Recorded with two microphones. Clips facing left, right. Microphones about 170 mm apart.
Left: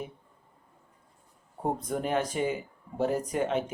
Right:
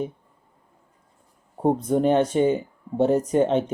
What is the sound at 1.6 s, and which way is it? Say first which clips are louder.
Speech: right 10 dB; 30° right (ahead or behind).